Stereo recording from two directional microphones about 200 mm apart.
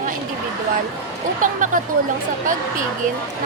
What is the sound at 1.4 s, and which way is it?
Speech, 40° right (ahead or behind).